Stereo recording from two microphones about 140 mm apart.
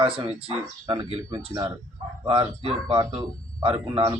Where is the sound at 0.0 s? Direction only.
40° right (ahead or behind).